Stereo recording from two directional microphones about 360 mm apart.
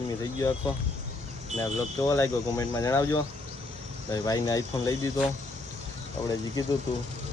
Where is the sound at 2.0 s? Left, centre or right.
Centre.